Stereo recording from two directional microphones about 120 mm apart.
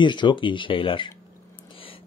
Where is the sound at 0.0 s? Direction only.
40° left (ahead or behind).